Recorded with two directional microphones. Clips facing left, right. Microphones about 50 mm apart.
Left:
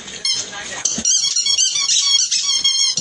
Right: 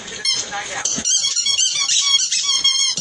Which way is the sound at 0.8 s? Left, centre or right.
Centre.